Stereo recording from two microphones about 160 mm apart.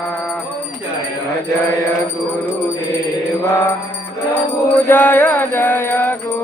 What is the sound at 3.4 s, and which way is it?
Music, 15° left (ahead or behind).